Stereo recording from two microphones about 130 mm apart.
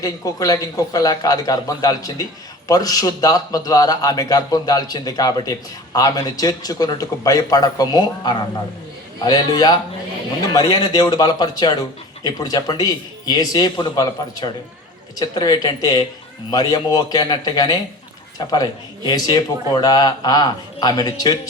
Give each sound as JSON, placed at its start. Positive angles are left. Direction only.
{"t": 0.0, "sound": "a man's voice", "side_deg": 30}